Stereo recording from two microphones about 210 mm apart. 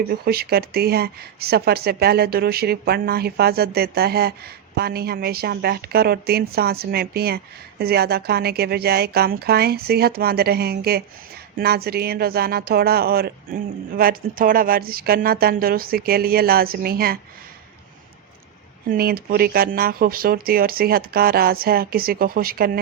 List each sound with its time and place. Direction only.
0.1 s speech: 45° right (ahead or behind)
18.9 s speech: 45° right (ahead or behind)